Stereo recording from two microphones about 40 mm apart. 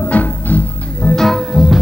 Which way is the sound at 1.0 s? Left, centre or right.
Centre.